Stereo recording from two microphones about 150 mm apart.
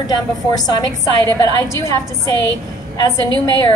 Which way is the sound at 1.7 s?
20° left (ahead or behind).